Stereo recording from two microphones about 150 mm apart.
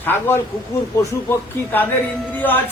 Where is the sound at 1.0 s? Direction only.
20° left (ahead or behind).